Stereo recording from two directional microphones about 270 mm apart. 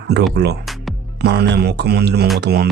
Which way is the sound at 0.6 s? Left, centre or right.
Centre.